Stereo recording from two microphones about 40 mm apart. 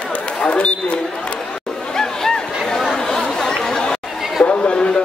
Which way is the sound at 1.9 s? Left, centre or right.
Centre.